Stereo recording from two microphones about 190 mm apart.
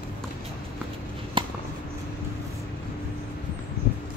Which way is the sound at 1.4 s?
25° right (ahead or behind).